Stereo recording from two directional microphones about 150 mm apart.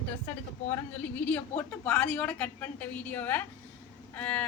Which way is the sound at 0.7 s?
10° left (ahead or behind).